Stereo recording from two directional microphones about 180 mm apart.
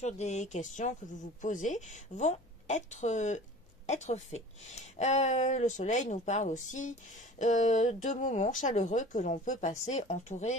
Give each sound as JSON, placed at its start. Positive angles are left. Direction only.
{"t": 0.0, "sound": "speech", "side_deg": 40}